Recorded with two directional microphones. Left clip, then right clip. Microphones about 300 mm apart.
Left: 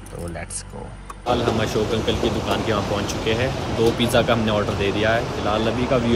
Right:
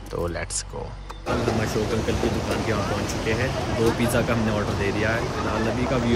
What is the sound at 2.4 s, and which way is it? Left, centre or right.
Speech, centre.